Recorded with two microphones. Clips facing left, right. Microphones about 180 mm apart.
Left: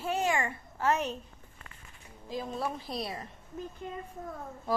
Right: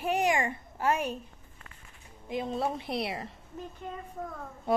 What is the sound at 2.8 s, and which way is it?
Speech, 70° right (ahead or behind).